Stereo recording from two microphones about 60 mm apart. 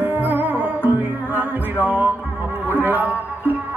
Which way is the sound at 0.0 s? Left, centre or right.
Right.